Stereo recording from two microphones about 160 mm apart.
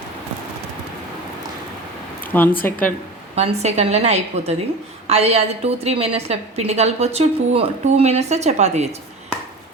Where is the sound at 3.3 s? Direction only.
40° right (ahead or behind).